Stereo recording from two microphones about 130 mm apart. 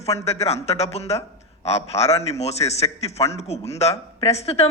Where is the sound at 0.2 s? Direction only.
55° left (ahead or behind).